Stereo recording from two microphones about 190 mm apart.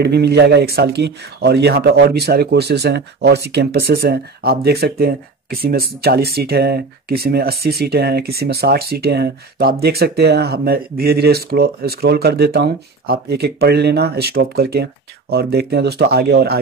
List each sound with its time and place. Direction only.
0.0 s speech: 60° right (ahead or behind)